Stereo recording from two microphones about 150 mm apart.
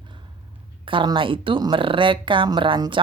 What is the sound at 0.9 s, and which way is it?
Speech, 35° right (ahead or behind).